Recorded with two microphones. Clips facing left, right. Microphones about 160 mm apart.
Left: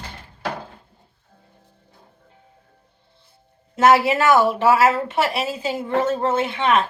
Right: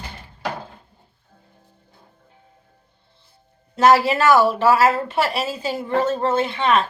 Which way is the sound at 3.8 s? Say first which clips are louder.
Even; 20° left (ahead or behind).